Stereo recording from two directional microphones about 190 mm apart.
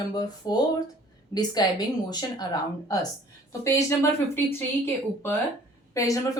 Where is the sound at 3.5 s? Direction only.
15° left (ahead or behind).